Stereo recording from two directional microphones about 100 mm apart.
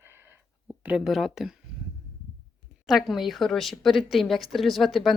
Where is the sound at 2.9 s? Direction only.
Centre (ahead or behind).